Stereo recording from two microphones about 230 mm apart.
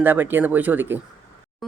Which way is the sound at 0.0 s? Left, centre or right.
Centre.